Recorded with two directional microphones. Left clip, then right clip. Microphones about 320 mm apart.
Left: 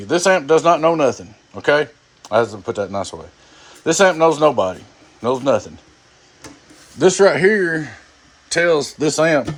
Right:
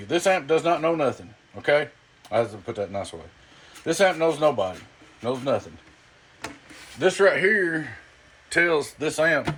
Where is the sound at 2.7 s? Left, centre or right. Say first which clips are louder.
Left 5 dB; left.